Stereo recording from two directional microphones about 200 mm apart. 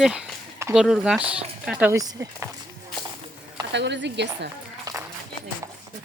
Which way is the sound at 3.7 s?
60° right (ahead or behind).